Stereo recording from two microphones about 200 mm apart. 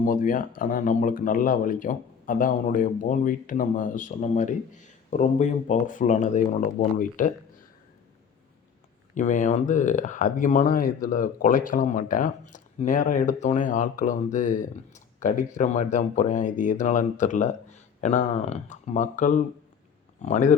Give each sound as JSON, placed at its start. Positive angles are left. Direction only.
{"t": 0.0, "sound": "speech", "side_deg": 40}
{"t": 9.1, "sound": "speech", "side_deg": 40}